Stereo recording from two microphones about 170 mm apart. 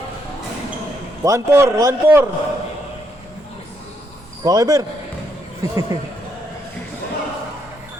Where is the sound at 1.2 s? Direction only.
15° right (ahead or behind).